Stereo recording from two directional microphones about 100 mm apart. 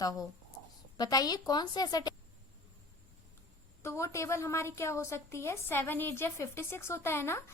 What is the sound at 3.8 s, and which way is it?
A woman's voice, 25° left (ahead or behind).